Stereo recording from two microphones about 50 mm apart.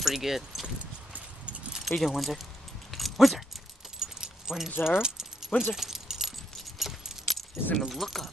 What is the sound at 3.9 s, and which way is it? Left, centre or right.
Keys jangling, centre.